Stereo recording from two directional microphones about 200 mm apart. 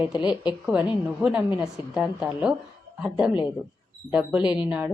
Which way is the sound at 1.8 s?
25° left (ahead or behind).